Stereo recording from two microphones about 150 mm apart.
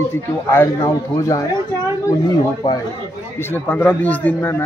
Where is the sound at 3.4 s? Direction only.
15° left (ahead or behind).